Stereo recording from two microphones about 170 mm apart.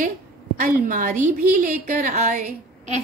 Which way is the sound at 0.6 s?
50° right (ahead or behind).